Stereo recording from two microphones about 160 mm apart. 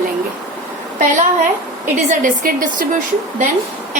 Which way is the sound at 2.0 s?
60° right (ahead or behind).